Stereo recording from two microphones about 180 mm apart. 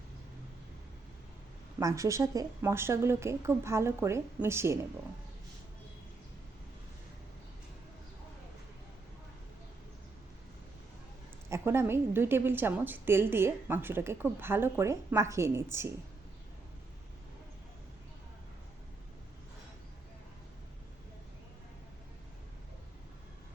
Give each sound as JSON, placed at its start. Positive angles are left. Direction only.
{"t": 1.8, "sound": "a woman's voice", "side_deg": -15}
{"t": 11.4, "sound": "a woman's voice", "side_deg": -15}